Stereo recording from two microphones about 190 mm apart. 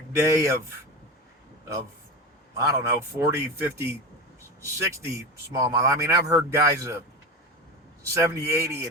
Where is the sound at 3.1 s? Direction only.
10° right (ahead or behind).